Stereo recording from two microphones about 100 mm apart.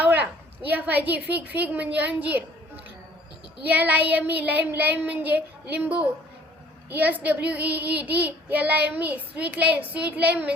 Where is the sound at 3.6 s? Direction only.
15° right (ahead or behind).